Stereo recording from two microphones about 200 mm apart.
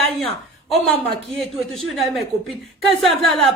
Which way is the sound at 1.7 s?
Centre (ahead or behind).